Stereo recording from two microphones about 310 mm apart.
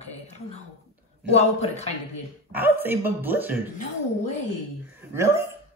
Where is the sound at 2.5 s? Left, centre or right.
Centre.